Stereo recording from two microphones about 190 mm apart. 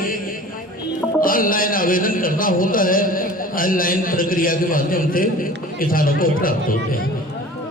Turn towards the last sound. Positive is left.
turn(degrees=50)  # may be behind; listen again after turning